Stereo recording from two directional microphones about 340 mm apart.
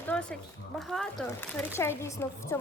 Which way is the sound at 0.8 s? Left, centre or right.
Centre.